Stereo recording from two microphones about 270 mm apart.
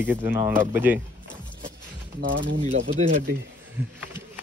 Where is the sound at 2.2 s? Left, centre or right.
Right.